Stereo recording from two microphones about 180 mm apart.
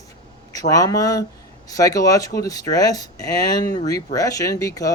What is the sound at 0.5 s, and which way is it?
Speech, 20° left (ahead or behind).